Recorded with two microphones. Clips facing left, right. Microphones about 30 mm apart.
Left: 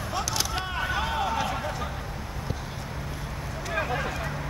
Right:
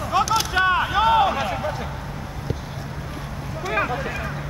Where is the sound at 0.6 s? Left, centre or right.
Right.